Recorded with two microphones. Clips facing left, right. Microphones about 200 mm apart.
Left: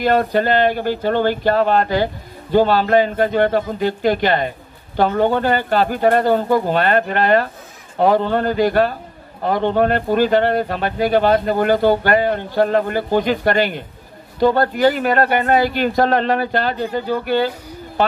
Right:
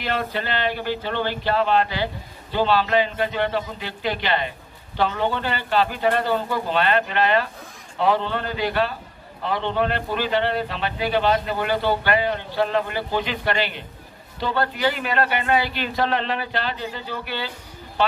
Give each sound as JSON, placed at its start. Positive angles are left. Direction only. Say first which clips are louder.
{"t": 0.0, "sound": "a man's voice", "louder": "left 10 dB", "side_deg": 45}